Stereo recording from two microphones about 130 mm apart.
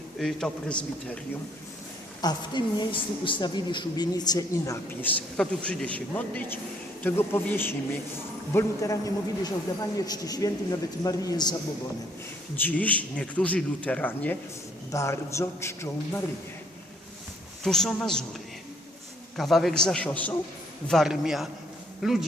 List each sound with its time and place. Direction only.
0.2 s a man's voice: centre (ahead or behind)
2.2 s a woman's voice: 35° left (ahead or behind)
5.0 s a man's voice: 10° left (ahead or behind); by 11.5 s 30° left (ahead or behind)
12.5 s a man's voice: 10° left (ahead or behind)
17.6 s a man's voice: 5° left (ahead or behind)
19.4 s a man's voice: centre (ahead or behind)